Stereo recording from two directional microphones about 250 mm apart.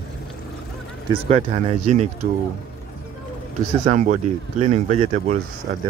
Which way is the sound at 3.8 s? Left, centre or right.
Right.